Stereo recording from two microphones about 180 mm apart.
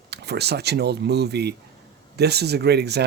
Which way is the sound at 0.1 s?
65° right (ahead or behind).